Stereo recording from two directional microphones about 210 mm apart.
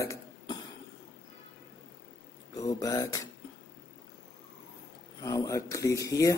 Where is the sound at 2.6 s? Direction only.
15° left (ahead or behind).